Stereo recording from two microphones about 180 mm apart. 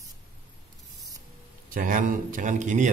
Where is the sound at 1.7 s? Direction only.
45° right (ahead or behind).